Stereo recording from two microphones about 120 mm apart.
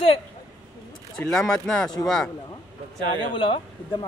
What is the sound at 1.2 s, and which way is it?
Speech, 5° left (ahead or behind).